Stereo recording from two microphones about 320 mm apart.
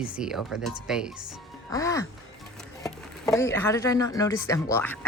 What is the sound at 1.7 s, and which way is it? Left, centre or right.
Speech, centre.